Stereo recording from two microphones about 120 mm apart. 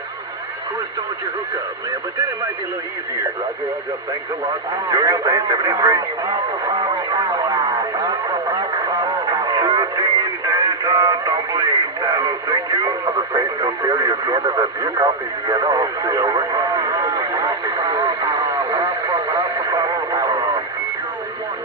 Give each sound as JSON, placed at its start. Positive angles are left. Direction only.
{"t": 4.7, "sound": "speech", "side_deg": -30}
{"t": 9.2, "sound": "radio", "side_deg": -35}